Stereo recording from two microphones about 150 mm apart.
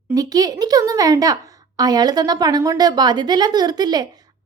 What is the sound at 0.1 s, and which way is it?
A woman's voice, 25° right (ahead or behind).